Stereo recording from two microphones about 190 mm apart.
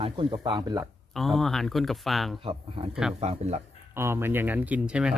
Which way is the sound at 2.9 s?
5° right (ahead or behind).